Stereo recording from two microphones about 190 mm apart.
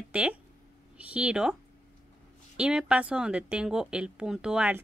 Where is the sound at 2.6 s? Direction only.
5° right (ahead or behind).